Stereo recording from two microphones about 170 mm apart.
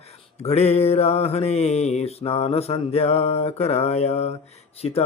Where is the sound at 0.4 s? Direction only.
40° left (ahead or behind).